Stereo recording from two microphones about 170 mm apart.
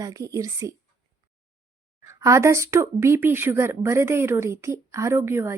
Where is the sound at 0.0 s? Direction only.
20° right (ahead or behind).